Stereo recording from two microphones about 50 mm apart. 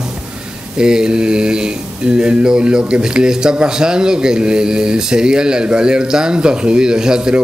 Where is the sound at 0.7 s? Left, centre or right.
Centre.